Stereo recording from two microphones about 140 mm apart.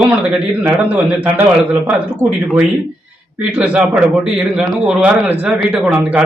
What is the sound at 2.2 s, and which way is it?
Speech, 25° right (ahead or behind).